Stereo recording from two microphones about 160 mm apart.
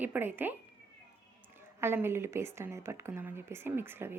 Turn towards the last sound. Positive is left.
turn(degrees=-15)  # may be behind; listen again after turning